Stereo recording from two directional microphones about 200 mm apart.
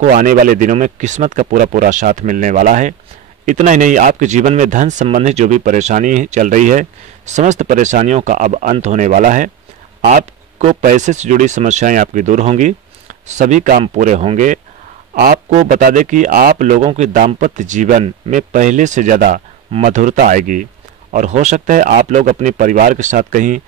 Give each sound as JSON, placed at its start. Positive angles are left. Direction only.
{"t": 0.0, "sound": "speech", "side_deg": -45}